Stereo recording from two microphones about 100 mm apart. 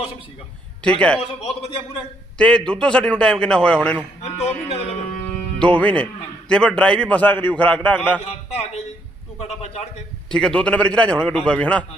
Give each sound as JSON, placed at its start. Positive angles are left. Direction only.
{"t": 0.9, "sound": "a man's voice", "side_deg": 10}
{"t": 2.4, "sound": "a man's voice", "side_deg": 10}
{"t": 4.2, "sound": "music", "side_deg": 90}
{"t": 5.3, "sound": "music", "side_deg": 10}
{"t": 6.5, "sound": "a man's voice", "side_deg": 10}
{"t": 8.2, "sound": "music", "side_deg": 90}
{"t": 10.2, "sound": "a man's voice", "side_deg": 5}